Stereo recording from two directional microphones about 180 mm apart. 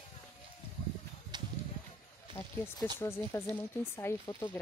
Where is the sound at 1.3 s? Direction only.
25° right (ahead or behind).